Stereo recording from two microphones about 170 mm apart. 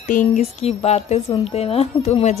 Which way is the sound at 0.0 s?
45° left (ahead or behind).